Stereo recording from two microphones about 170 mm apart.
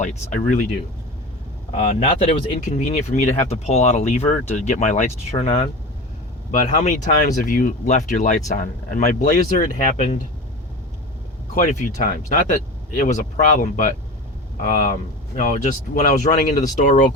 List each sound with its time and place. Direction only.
0.0 s speech: 45° left (ahead or behind)
1.7 s speech: 35° left (ahead or behind)
11.5 s speech: 50° left (ahead or behind)